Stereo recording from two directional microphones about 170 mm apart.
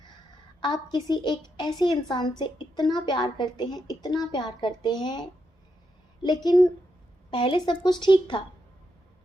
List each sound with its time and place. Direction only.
0.6 s a woman's voice: 25° left (ahead or behind)
6.4 s a woman's voice: 25° left (ahead or behind)